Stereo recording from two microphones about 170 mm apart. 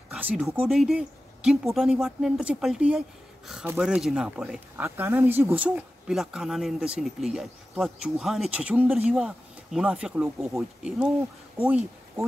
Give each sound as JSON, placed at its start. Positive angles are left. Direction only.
{"t": 0.1, "sound": "speech", "side_deg": -5}